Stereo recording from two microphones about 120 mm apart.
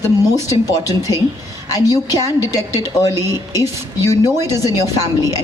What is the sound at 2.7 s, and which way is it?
Speech, 25° right (ahead or behind).